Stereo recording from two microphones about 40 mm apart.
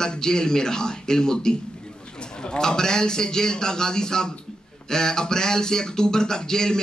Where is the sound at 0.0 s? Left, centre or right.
Centre.